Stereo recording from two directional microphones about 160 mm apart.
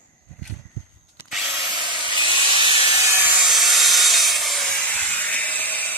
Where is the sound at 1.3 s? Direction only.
Centre (ahead or behind).